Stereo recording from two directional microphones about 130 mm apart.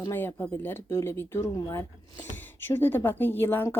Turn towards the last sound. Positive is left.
turn(degrees=15)  # may be behind; listen again after turning